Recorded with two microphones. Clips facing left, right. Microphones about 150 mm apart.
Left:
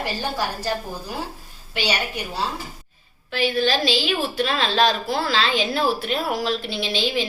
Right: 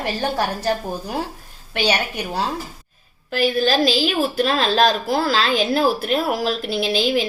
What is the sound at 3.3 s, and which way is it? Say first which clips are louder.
A woman's voice: right 3 dB; 40° right (ahead or behind).